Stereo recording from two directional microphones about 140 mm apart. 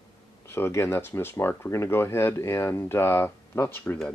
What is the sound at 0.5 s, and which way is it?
Speech, 15° left (ahead or behind).